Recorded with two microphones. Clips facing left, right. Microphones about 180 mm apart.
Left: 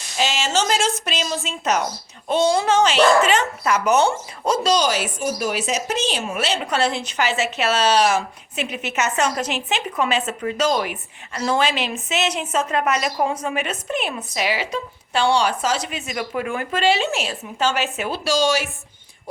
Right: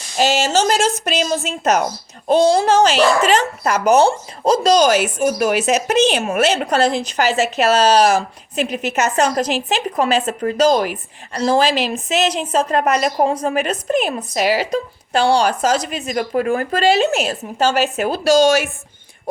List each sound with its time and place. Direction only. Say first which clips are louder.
0.2 s a woman's voice: right 6 dB; 40° right (ahead or behind)